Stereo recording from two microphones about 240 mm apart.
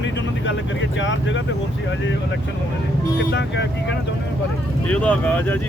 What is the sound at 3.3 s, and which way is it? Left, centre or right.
Speech, left.